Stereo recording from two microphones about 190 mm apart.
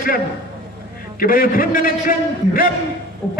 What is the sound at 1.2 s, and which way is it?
A man's voice, 50° left (ahead or behind).